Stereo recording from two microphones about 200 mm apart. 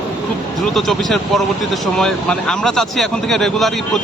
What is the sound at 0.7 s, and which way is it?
Speech, centre (ahead or behind).